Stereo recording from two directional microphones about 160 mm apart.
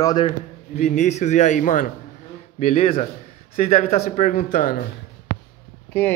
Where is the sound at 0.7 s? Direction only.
45° left (ahead or behind).